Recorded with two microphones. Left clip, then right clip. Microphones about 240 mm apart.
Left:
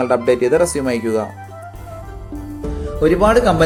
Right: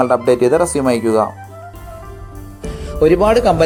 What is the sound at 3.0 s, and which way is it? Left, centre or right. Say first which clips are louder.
Speech: right 2 dB; right.